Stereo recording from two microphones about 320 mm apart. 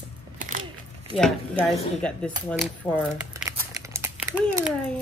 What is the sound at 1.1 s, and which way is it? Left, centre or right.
Speech, centre.